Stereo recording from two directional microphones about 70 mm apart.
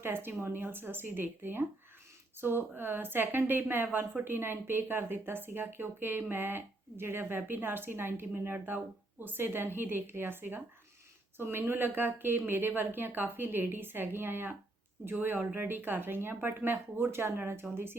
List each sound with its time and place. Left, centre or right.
0.0 s speech: right
15.5 s speech: right